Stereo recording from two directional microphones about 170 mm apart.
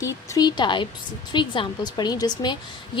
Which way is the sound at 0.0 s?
20° left (ahead or behind).